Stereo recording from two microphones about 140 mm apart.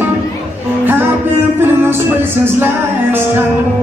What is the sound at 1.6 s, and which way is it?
Music, 15° right (ahead or behind).